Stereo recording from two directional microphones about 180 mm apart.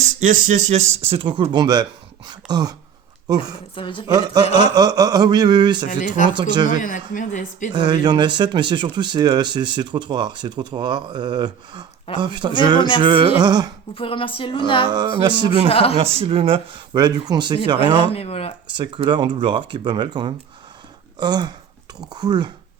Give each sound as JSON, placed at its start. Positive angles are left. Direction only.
{"t": 0.2, "sound": "speech", "side_deg": -45}
{"t": 3.8, "sound": "speech", "side_deg": 25}
{"t": 4.0, "sound": "speech", "side_deg": -20}
{"t": 5.9, "sound": "speech", "side_deg": 45}
{"t": 7.7, "sound": "speech", "side_deg": -25}
{"t": 13.9, "sound": "speech", "side_deg": 30}
{"t": 14.8, "sound": "speech", "side_deg": -25}
{"t": 15.7, "sound": "speech", "side_deg": 30}
{"t": 16.1, "sound": "speech", "side_deg": -30}
{"t": 18.1, "sound": "speech", "side_deg": 35}
{"t": 18.8, "sound": "speech", "side_deg": -25}